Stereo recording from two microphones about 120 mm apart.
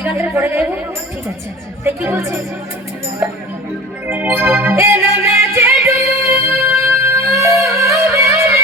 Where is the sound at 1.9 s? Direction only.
20° right (ahead or behind).